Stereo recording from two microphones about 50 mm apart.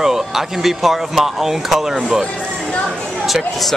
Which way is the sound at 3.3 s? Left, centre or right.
Centre.